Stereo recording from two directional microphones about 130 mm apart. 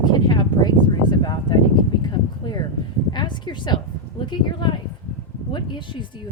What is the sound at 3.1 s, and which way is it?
Speech, 35° left (ahead or behind).